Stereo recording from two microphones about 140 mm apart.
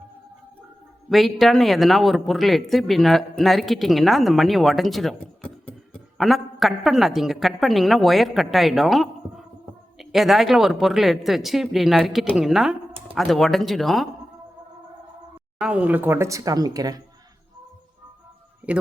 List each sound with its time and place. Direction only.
1.1 s speech: centre (ahead or behind)
15.5 s speech: 5° right (ahead or behind); by 17.0 s 25° right (ahead or behind)
18.6 s a man's voice: 10° right (ahead or behind)